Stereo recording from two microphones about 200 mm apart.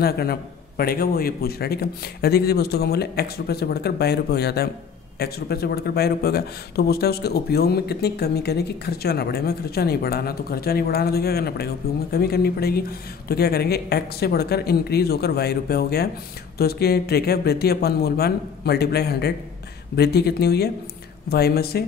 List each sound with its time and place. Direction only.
0.0 s speech: 50° left (ahead or behind)